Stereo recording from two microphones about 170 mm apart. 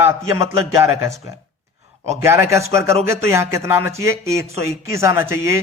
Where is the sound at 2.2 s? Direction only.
15° right (ahead or behind).